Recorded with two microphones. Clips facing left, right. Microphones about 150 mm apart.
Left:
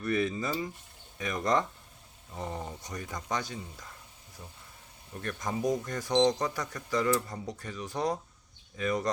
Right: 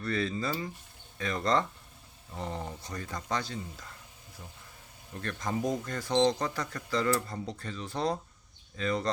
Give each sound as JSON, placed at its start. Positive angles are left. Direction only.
{"t": 0.0, "sound": "speech", "side_deg": 15}
{"t": 5.1, "sound": "speech", "side_deg": 15}